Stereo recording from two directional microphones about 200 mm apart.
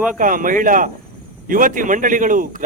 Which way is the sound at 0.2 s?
40° right (ahead or behind).